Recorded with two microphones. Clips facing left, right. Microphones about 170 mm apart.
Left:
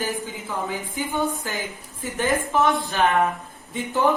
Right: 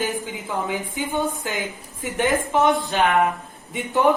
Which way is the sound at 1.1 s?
20° right (ahead or behind).